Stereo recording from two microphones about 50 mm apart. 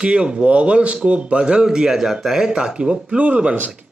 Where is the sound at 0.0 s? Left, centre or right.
Right.